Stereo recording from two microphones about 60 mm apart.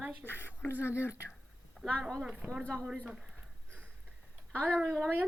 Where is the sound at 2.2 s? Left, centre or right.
Centre.